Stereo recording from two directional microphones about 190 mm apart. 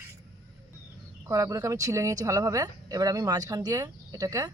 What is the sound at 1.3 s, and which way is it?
Speech, 15° right (ahead or behind).